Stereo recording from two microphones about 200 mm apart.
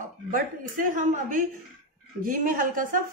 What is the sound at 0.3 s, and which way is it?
Speech, 40° right (ahead or behind).